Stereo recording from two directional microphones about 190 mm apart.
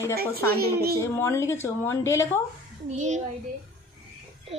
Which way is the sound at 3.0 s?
40° right (ahead or behind).